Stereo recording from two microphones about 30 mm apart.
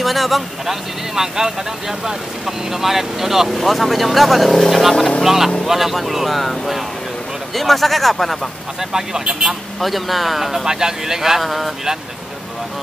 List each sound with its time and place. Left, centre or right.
0.0 s speech: centre
0.7 s speech: centre
3.5 s speech: centre
5.2 s speech: centre
8.9 s speech: centre
9.8 s speech: centre
10.7 s speech: centre
11.4 s speech: centre